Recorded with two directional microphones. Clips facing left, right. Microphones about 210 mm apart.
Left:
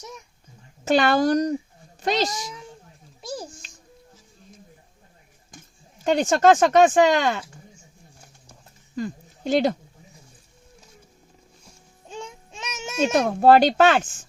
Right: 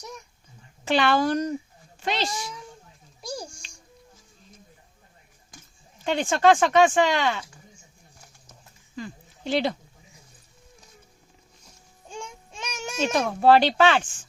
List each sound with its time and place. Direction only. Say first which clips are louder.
0.9 s a child's voice: left 3 dB; 45° left (ahead or behind)
3.2 s a child's voice: left 2 dB; 5° left (ahead or behind)
6.1 s speech: left 3 dB; 40° left (ahead or behind)
9.0 s speech: left 7 dB; 45° left (ahead or behind)
12.0 s child singing: left 2 dB; 5° left (ahead or behind)
13.1 s speech: left 3 dB; 45° left (ahead or behind)